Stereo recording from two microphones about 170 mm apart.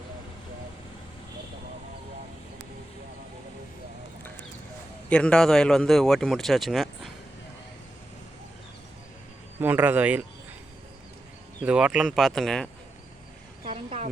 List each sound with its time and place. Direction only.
5.0 s speech: 5° left (ahead or behind)
9.6 s a man's voice: 10° right (ahead or behind)
11.6 s speech: 5° right (ahead or behind)
13.7 s speech: 35° right (ahead or behind)